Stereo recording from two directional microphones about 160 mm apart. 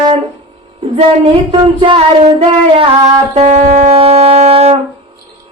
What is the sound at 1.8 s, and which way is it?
Wind instrument, 30° right (ahead or behind).